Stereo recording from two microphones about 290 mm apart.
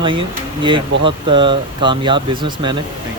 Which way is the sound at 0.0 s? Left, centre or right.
Centre.